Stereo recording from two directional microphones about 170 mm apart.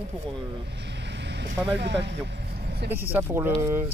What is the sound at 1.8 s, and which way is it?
Speech, 90° right.